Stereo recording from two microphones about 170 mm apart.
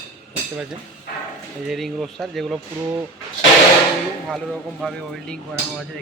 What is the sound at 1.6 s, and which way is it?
Speech, centre (ahead or behind).